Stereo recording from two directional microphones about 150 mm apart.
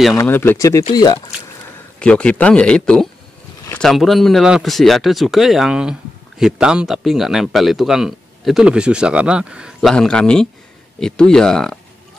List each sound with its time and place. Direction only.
0.1 s speech: 20° left (ahead or behind)
2.0 s speech: 10° left (ahead or behind)